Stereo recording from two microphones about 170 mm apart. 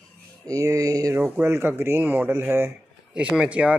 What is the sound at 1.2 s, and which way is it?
Speech, 10° right (ahead or behind).